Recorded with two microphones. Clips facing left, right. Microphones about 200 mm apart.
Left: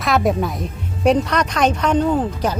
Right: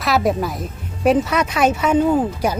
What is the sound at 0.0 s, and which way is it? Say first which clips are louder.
Speech: even; centre (ahead or behind).